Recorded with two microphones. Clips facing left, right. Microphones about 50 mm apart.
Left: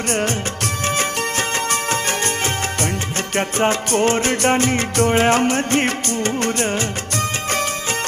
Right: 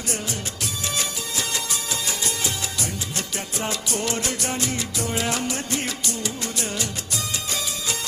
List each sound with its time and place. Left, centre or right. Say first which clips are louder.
0.9 s music: left 8 dB; left